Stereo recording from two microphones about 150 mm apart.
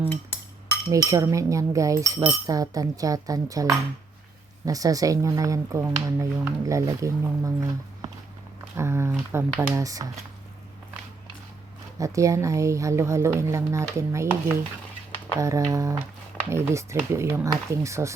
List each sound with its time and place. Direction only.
0.1 s cutlery: 15° left (ahead or behind)
0.9 s speech: 20° right (ahead or behind)
11.9 s speech: 20° right (ahead or behind)